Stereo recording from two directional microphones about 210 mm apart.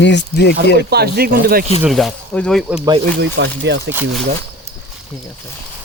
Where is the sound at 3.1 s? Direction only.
55° right (ahead or behind).